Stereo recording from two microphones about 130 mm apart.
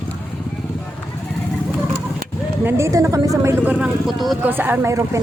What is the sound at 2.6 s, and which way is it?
A woman's voice, 20° right (ahead or behind).